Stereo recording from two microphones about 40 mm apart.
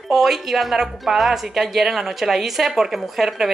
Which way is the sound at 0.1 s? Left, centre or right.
Centre.